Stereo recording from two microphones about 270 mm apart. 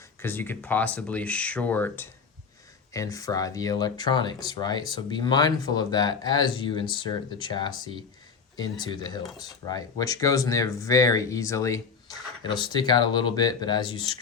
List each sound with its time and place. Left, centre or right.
0.2 s speech: centre
8.8 s speech: centre